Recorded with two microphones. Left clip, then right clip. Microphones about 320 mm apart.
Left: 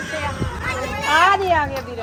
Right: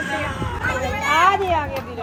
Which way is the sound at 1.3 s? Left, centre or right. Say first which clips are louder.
Left 3 dB; left.